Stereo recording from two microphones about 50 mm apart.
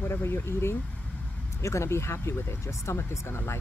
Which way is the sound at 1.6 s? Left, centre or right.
Left.